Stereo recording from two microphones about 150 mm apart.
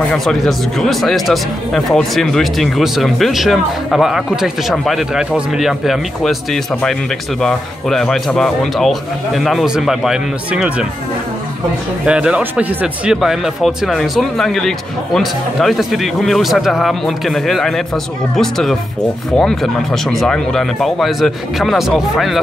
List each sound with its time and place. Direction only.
0.1 s speech: 5° left (ahead or behind)
12.1 s speech: 5° right (ahead or behind)